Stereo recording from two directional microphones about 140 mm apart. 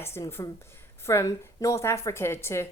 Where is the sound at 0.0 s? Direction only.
15° left (ahead or behind).